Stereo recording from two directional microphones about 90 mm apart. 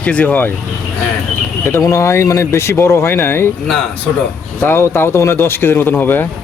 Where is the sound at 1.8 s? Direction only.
35° left (ahead or behind).